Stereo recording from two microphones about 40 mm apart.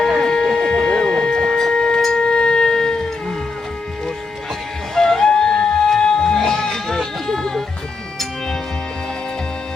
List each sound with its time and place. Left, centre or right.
0.2 s a sound: centre
2.0 s wind instrument: centre
4.9 s music: centre